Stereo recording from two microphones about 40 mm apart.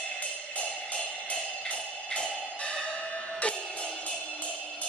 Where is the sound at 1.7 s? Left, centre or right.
Left.